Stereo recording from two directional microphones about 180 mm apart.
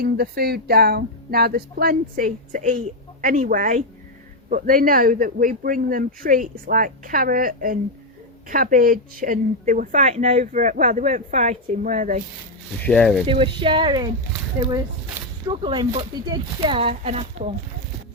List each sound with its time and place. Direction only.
0.0 s speech: 60° right (ahead or behind)
12.8 s speech: 5° left (ahead or behind)
13.2 s speech: 30° right (ahead or behind)
15.4 s speech: 25° right (ahead or behind)